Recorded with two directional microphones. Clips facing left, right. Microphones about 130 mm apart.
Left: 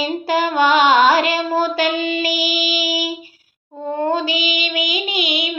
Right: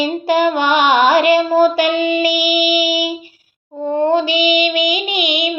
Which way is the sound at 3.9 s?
20° right (ahead or behind).